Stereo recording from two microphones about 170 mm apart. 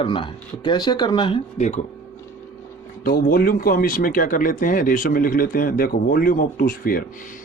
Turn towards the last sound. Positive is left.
turn(degrees=60)  # may be behind; listen again after turning